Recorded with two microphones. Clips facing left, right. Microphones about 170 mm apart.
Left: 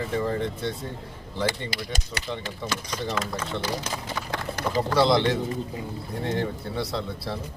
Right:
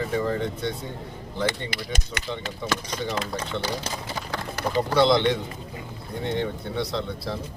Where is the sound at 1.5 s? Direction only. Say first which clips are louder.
Right 1 dB; 40° left (ahead or behind).